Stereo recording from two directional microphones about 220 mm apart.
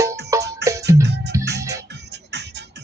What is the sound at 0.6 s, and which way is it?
Music, 50° right (ahead or behind).